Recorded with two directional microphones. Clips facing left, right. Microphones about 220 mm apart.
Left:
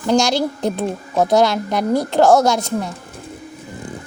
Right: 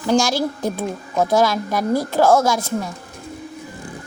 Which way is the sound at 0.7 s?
20° left (ahead or behind).